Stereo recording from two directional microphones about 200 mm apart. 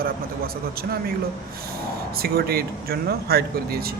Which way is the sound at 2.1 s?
50° right (ahead or behind).